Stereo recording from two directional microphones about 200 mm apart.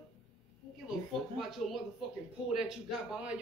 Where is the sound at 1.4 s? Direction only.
Centre (ahead or behind).